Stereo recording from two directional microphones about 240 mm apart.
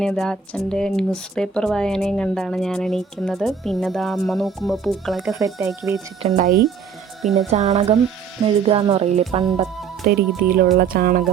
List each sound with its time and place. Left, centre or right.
0.0 s speech: centre
5.5 s speech: centre
6.2 s speech: right
7.2 s speech: centre
7.5 s music: right
10.1 s speech: right